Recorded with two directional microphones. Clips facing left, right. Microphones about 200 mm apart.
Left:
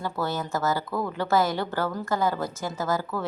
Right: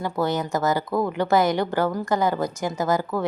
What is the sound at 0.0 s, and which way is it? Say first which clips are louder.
A woman's voice: right 5 dB; 15° right (ahead or behind).